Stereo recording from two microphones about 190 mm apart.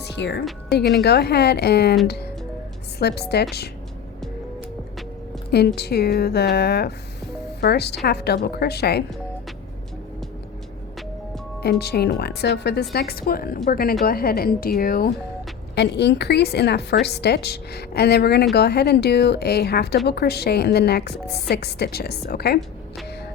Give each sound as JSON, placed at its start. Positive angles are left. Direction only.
{"t": 0.0, "sound": "a woman's voice", "side_deg": 65}
{"t": 5.5, "sound": "a woman's voice", "side_deg": 60}
{"t": 11.6, "sound": "a woman's voice", "side_deg": 60}